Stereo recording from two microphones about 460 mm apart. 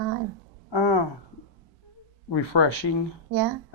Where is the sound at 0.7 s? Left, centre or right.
Left.